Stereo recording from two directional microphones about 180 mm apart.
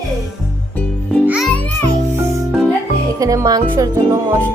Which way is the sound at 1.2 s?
5° right (ahead or behind).